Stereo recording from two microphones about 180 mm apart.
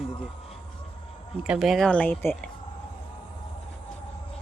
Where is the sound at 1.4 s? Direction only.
5° right (ahead or behind).